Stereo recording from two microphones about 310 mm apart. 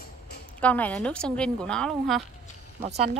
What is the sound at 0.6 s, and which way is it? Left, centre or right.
Speech, centre.